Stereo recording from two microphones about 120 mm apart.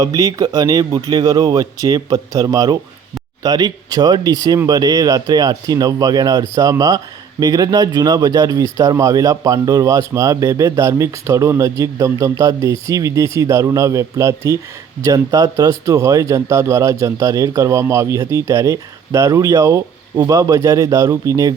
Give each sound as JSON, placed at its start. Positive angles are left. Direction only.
{"t": 0.0, "sound": "speech", "side_deg": -30}